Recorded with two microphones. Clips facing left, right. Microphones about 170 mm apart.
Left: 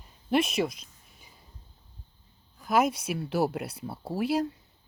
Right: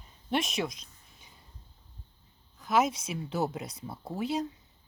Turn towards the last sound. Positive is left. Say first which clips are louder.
# left 4 dB
turn(degrees=5)  # may be behind; listen again after turning